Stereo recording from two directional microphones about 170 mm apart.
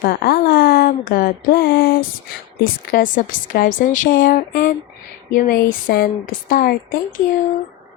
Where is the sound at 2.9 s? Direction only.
55° left (ahead or behind).